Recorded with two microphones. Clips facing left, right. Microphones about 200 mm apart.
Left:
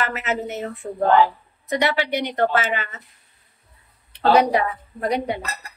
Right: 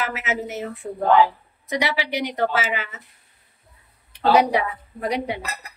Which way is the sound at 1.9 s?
10° right (ahead or behind).